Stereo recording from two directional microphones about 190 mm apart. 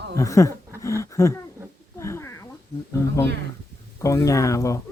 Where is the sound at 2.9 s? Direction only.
15° left (ahead or behind).